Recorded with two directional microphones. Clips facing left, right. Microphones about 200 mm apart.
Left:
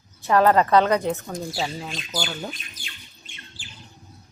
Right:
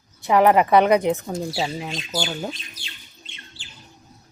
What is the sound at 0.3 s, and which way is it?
Speech, 15° right (ahead or behind).